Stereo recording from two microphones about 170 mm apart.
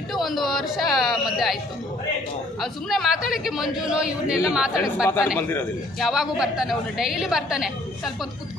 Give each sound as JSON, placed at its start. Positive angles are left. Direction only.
{"t": 0.1, "sound": "a sound", "side_deg": 0}
{"t": 2.6, "sound": "a man's voice", "side_deg": 0}
{"t": 5.0, "sound": "a man's voice", "side_deg": 15}
{"t": 5.9, "sound": "a man's voice", "side_deg": 0}